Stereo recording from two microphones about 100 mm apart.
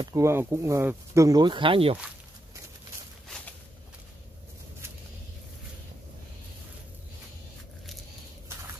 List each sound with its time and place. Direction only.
0.0 s speech: 30° right (ahead or behind)
1.4 s speech: 55° right (ahead or behind)